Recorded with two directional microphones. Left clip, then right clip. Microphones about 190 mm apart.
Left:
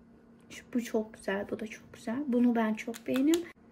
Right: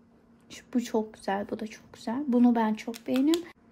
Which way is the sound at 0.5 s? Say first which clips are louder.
Right 4 dB; centre (ahead or behind).